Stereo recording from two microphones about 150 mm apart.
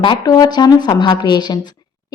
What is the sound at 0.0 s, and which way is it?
A woman's voice, 30° left (ahead or behind).